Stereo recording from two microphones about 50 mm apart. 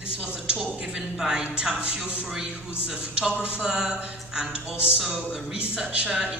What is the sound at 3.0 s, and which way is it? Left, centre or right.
A man's voice, right.